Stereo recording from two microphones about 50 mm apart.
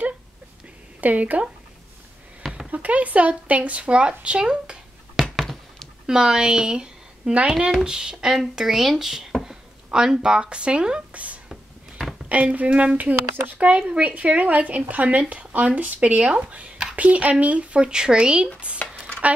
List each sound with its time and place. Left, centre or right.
1.0 s speech: right
2.7 s speech: right
5.2 s a sound: centre
6.0 s a woman's voice: centre